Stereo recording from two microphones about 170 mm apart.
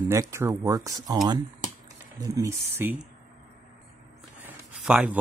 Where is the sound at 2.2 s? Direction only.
20° right (ahead or behind).